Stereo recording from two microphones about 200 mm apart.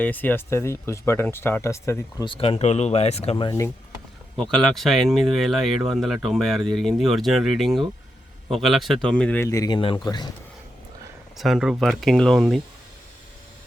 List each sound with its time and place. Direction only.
0.0 s speech: 10° left (ahead or behind)
4.5 s speech: centre (ahead or behind); by 10.2 s 20° left (ahead or behind)
11.3 s speech: centre (ahead or behind)